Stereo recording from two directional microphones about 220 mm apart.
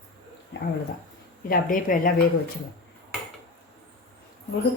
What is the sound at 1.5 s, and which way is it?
Speech, 40° left (ahead or behind).